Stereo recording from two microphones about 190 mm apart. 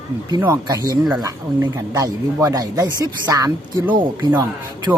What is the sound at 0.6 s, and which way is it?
Speech, 20° right (ahead or behind).